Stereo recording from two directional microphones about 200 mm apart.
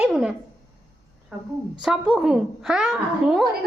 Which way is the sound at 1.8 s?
Centre (ahead or behind).